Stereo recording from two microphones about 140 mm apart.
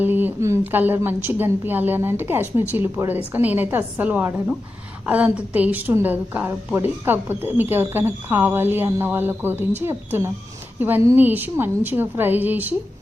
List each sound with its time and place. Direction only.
0.0 s a woman's voice: 15° right (ahead or behind)